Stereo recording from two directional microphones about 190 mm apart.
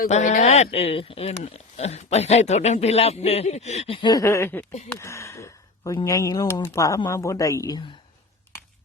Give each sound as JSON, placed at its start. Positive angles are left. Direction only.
{"t": 0.0, "sound": "speech", "side_deg": 40}